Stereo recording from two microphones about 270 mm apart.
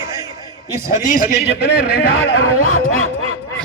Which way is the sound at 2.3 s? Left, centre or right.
Left.